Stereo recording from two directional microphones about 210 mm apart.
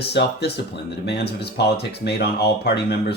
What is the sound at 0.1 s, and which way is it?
Speech, 50° left (ahead or behind).